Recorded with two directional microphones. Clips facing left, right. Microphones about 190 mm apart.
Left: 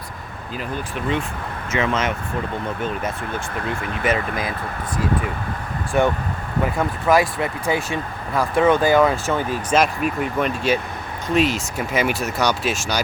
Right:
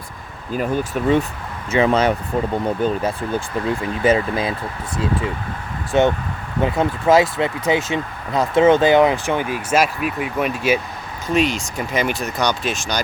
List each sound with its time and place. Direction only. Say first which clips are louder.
0.5 s speech: right 7 dB; 45° right (ahead or behind)
1.7 s speech: right 6 dB; 35° right (ahead or behind)
5.9 s speech: right 3 dB; 25° right (ahead or behind); by 10.8 s 5° right (ahead or behind)
11.3 s speech: even; 5° left (ahead or behind)